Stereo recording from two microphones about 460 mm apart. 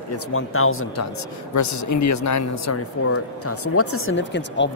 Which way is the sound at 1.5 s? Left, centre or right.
Left.